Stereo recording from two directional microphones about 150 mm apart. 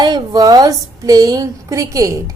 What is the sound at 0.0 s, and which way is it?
A woman's voice, 30° right (ahead or behind).